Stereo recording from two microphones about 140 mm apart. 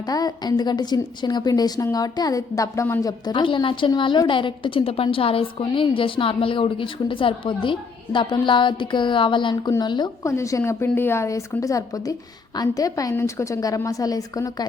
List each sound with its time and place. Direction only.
0.0 s a woman's voice: 25° left (ahead or behind)
10.2 s a woman's voice: 20° left (ahead or behind)